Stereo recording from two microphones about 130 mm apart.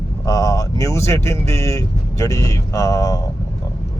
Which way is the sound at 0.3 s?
30° left (ahead or behind).